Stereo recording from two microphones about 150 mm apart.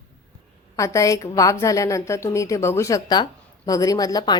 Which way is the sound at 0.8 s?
20° left (ahead or behind).